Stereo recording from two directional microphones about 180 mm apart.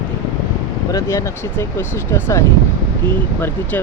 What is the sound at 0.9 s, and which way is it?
Speech, 15° left (ahead or behind).